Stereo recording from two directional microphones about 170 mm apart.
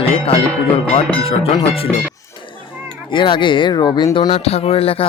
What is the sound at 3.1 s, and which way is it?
Speech, 30° left (ahead or behind).